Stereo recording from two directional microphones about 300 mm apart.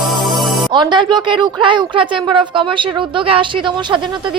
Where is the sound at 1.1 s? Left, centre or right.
Centre.